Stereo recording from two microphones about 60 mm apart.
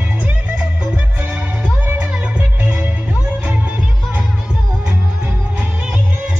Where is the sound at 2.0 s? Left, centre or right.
Right.